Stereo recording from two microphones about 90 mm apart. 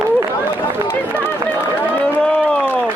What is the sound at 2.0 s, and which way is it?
Run, 10° left (ahead or behind).